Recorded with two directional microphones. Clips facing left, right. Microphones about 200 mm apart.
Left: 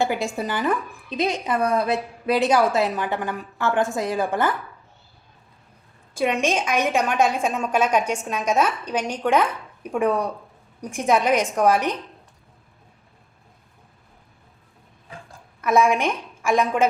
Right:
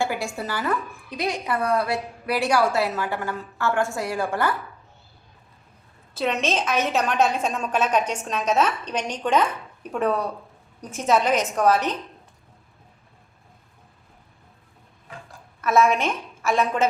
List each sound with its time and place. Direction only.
0.0 s a woman's voice: 20° left (ahead or behind)
6.1 s a woman's voice: 10° left (ahead or behind)
15.6 s a woman's voice: 15° left (ahead or behind)